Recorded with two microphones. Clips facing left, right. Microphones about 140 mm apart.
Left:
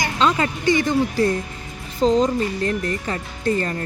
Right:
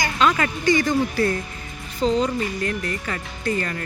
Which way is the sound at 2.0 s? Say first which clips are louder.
Left 3 dB; 40° left (ahead or behind).